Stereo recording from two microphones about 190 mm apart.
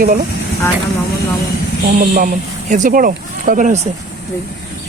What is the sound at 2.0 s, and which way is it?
Speech, 45° right (ahead or behind).